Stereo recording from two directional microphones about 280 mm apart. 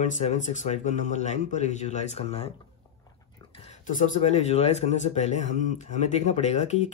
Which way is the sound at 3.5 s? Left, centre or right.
Left.